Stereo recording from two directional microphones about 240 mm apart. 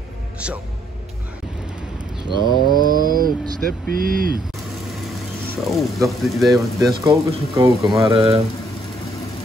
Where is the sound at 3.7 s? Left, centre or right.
Right.